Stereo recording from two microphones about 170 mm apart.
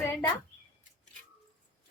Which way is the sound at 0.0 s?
15° left (ahead or behind).